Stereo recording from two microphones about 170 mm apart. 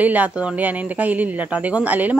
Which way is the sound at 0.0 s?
10° right (ahead or behind).